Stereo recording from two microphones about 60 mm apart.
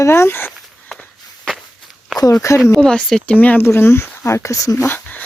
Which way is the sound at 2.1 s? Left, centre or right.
Left.